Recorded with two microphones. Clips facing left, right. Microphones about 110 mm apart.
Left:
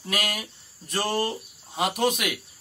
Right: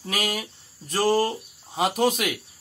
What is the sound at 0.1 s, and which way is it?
A man's voice, 25° right (ahead or behind).